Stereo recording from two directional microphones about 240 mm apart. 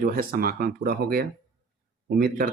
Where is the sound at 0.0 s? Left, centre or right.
Right.